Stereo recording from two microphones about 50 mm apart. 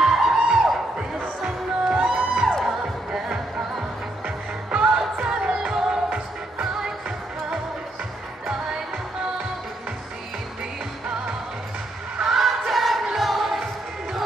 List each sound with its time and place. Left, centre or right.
0.0 s music: centre
4.6 s music: right
12.2 s music: centre